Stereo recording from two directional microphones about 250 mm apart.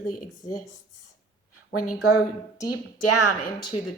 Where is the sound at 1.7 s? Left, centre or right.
Left.